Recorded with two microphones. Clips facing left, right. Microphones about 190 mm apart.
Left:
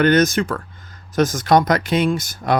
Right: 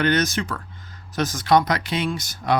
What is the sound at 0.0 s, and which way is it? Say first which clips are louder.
Speech: left 6 dB; 50° left (ahead or behind).